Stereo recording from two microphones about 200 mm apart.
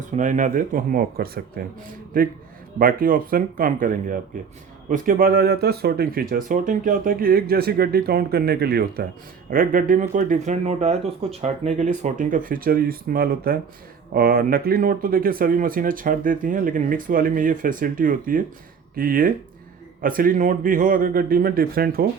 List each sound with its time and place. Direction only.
0.0 s speech: 40° right (ahead or behind)
2.7 s speech: 45° right (ahead or behind)